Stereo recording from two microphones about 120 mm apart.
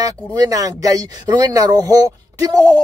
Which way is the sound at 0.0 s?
30° right (ahead or behind).